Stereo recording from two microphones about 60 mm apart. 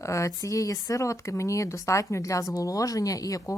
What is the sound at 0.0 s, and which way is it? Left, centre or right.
Speech, left.